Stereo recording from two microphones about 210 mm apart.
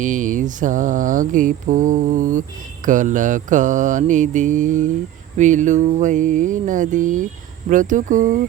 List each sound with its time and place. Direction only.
0.0 s mantra: 35° right (ahead or behind)